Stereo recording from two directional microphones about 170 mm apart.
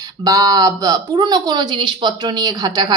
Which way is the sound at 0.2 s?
20° right (ahead or behind).